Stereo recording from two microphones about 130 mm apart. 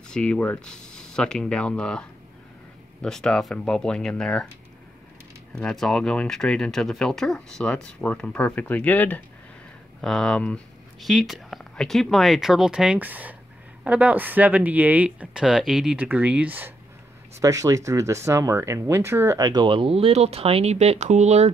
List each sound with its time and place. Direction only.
0.1 s speech: 10° left (ahead or behind)
5.5 s speech: 5° left (ahead or behind); by 16.7 s 15° right (ahead or behind)
17.4 s speech: 25° right (ahead or behind); by 20.7 s 50° right (ahead or behind)
20.7 s speech: 60° right (ahead or behind)